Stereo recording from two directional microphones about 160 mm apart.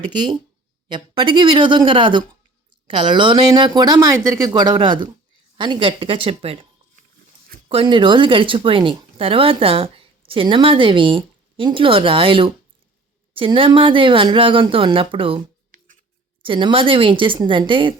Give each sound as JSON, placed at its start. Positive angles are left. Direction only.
{"t": 0.1, "sound": "speech", "side_deg": -30}
{"t": 7.7, "sound": "speech", "side_deg": -35}